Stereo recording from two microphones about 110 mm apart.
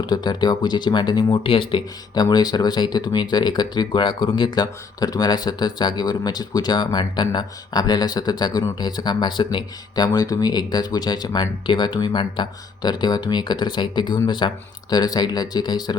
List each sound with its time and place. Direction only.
0.0 s speech: 40° left (ahead or behind)
2.2 s speech: 40° left (ahead or behind)